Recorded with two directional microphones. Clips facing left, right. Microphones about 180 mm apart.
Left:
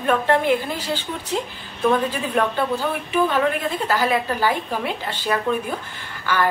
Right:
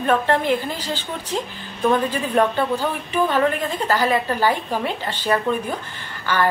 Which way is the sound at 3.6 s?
10° left (ahead or behind).